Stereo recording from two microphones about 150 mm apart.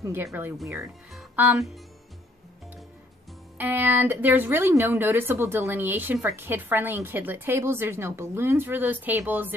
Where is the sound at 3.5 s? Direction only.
15° right (ahead or behind).